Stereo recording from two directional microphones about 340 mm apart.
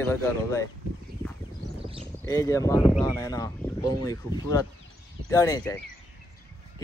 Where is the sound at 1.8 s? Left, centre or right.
Centre.